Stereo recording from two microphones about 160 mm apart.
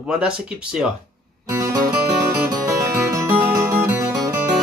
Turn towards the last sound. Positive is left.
turn(degrees=-15)  # may be behind; listen again after turning